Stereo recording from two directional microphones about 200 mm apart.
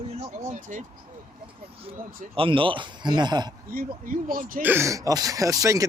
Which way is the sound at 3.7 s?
45° right (ahead or behind).